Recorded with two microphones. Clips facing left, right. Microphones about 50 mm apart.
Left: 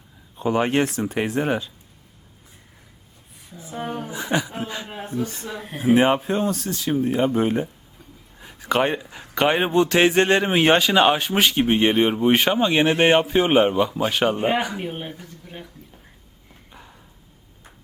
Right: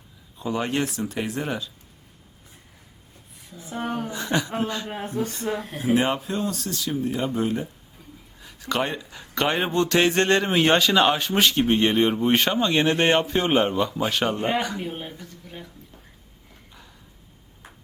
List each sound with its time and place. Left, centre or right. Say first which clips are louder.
0.3 s speech: left 5 dB; left
3.5 s speech: right 1 dB; centre
5.8 s speech: left 6 dB; left